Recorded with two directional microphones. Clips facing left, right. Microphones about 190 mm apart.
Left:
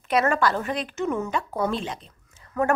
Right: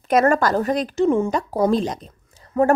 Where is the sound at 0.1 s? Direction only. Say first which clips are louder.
Right 5 dB; 45° right (ahead or behind).